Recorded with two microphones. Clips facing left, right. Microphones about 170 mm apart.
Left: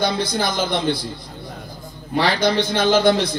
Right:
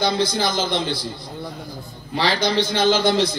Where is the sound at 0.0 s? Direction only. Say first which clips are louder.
Even; 55° left (ahead or behind).